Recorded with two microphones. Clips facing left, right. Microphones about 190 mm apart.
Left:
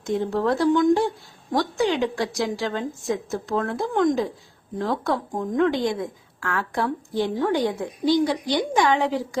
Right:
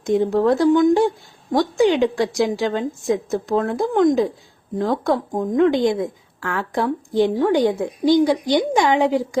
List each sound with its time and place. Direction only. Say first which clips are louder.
0.0 s a woman's voice: right 6 dB; 15° right (ahead or behind)